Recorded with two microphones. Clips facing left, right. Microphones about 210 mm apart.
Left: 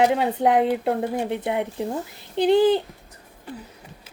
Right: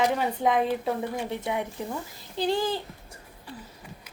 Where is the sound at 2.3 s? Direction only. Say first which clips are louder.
Left 10 dB; 65° left (ahead or behind).